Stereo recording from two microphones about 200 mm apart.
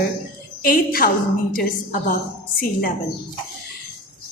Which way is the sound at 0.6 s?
45° left (ahead or behind).